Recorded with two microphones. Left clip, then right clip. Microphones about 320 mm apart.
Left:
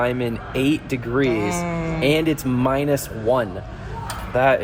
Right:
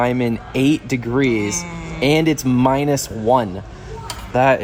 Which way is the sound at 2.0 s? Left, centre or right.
Right.